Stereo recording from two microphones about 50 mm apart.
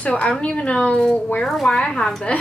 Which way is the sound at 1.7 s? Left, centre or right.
Centre.